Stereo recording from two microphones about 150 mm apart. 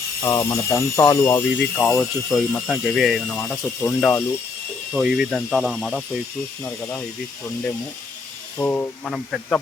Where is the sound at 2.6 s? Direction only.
Centre (ahead or behind).